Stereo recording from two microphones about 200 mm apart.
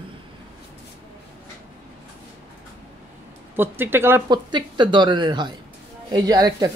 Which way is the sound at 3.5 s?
10° right (ahead or behind).